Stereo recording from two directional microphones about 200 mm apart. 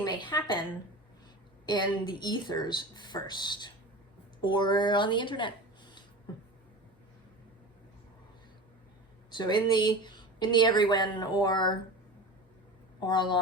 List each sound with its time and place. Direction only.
0.0 s a woman's voice: 20° left (ahead or behind)
1.6 s speech: 20° left (ahead or behind)
9.3 s speech: 20° left (ahead or behind)
13.0 s speech: 20° left (ahead or behind)